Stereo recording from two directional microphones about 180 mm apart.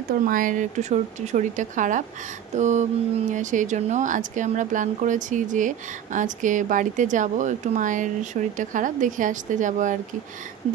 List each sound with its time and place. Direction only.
0.2 s speech: 50° right (ahead or behind)